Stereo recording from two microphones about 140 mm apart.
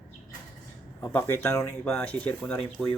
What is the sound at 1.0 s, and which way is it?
Speech, 20° left (ahead or behind).